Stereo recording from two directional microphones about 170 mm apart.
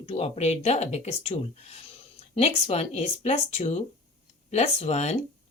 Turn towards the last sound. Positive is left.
turn(degrees=40)  # may be behind; listen again after turning